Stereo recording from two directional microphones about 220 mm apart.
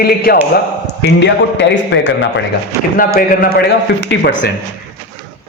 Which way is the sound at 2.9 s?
40° left (ahead or behind).